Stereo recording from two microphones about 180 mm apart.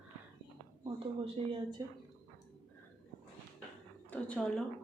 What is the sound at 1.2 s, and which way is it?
Speech, 30° right (ahead or behind).